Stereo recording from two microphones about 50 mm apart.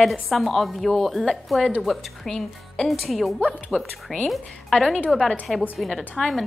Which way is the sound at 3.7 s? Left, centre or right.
Right.